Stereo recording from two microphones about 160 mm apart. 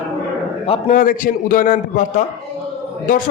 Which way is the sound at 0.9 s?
55° left (ahead or behind).